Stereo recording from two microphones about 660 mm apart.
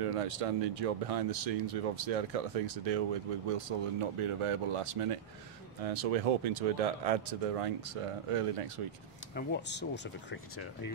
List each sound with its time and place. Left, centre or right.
0.0 s speech: right
9.3 s speech: centre